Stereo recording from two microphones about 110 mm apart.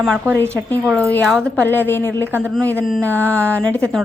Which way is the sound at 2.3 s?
20° right (ahead or behind).